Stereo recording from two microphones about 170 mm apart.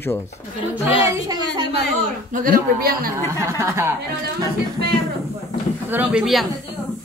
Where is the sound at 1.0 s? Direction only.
25° right (ahead or behind).